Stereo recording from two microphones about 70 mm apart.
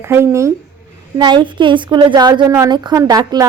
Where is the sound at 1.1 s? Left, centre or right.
Right.